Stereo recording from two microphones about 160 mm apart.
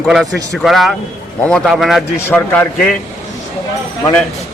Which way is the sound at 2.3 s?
10° left (ahead or behind).